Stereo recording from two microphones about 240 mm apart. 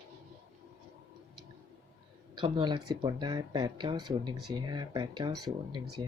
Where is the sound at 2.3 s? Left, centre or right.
Right.